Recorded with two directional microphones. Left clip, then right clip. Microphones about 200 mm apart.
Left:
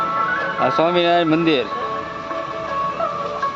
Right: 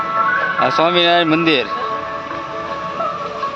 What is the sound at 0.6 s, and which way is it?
Speech, centre (ahead or behind).